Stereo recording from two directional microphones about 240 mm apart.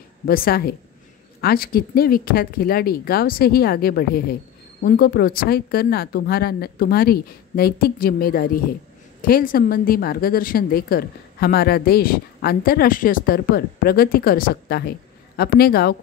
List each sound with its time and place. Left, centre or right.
0.3 s a woman's voice: left